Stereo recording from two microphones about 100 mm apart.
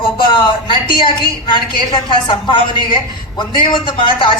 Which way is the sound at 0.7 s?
55° left (ahead or behind).